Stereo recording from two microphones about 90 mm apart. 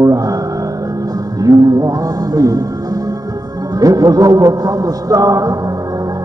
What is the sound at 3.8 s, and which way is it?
A man's voice, 40° right (ahead or behind).